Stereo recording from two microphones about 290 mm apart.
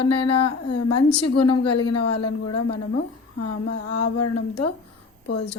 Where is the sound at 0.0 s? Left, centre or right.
Left.